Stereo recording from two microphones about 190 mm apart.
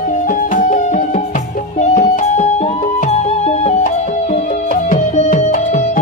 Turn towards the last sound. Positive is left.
turn(degrees=40)  # may be behind; listen again after turning